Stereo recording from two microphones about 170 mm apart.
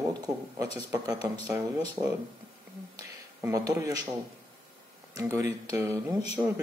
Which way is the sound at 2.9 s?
20° right (ahead or behind).